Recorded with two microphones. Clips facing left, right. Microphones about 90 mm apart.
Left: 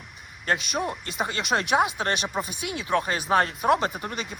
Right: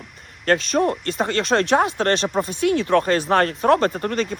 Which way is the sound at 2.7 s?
55° right (ahead or behind).